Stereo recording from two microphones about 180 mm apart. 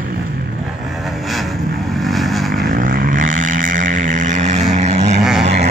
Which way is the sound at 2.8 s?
50° right (ahead or behind).